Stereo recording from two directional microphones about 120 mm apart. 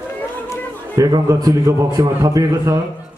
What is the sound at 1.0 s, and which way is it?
A man's voice, 30° right (ahead or behind).